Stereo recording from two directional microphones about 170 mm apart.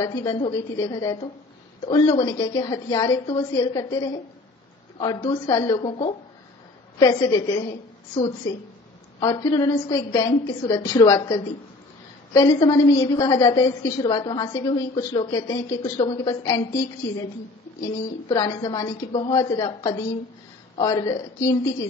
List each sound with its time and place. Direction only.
0.0 s a woman's voice: 20° left (ahead or behind)
9.2 s a woman's voice: 20° left (ahead or behind)
18.3 s a woman's voice: 20° left (ahead or behind)